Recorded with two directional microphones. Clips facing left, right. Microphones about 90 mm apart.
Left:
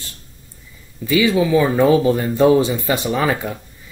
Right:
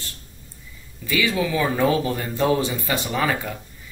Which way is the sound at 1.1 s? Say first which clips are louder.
Left 7 dB; 20° left (ahead or behind).